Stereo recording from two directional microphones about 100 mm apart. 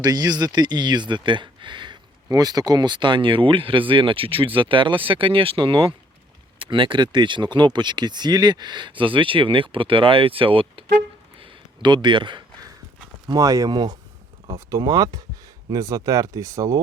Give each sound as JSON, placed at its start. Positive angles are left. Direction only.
{"t": 0.0, "sound": "speech", "side_deg": -40}
{"t": 12.0, "sound": "speech", "side_deg": -50}
{"t": 13.2, "sound": "speech", "side_deg": -35}